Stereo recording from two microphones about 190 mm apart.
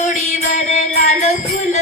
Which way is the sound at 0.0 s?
35° left (ahead or behind).